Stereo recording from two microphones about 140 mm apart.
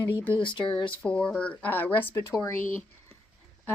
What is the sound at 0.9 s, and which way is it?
Speech, 10° left (ahead or behind).